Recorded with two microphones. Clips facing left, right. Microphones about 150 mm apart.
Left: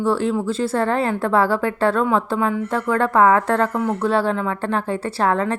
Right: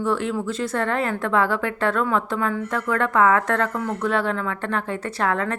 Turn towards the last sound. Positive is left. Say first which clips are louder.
# left 4 dB
turn(degrees=30)  # may be behind; listen again after turning